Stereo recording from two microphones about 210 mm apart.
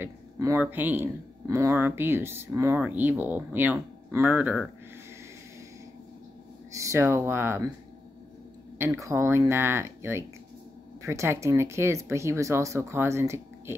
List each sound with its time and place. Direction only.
0.0 s speech: 10° right (ahead or behind)
6.7 s speech: 15° right (ahead or behind)
8.7 s speech: 15° right (ahead or behind)